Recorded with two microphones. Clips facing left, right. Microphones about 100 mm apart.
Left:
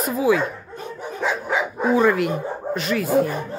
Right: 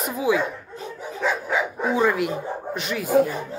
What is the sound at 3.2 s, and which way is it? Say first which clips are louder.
Speech: even; 60° left (ahead or behind).